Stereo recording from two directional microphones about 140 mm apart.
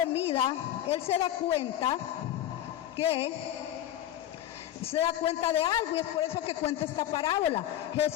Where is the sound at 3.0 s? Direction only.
45° left (ahead or behind).